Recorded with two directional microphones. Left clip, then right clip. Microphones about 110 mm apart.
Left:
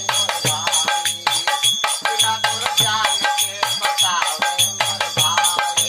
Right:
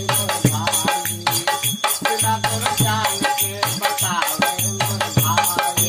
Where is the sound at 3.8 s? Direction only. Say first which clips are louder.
Left 3 dB; 25° right (ahead or behind).